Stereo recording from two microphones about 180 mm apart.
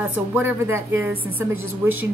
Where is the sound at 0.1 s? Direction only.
10° right (ahead or behind).